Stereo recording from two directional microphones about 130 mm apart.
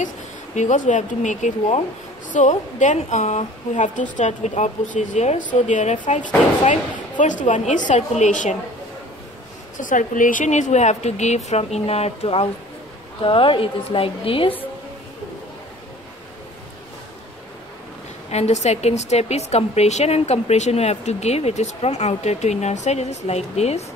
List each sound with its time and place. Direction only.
0.6 s a woman's voice: 70° left (ahead or behind)
9.8 s a woman's voice: 90° left; by 14.5 s 45° left (ahead or behind)
18.3 s a woman's voice: 60° left (ahead or behind)